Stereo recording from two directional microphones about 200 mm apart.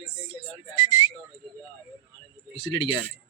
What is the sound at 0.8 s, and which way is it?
Whistling, 30° left (ahead or behind).